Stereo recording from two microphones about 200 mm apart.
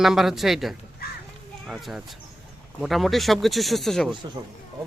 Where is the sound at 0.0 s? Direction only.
Centre (ahead or behind).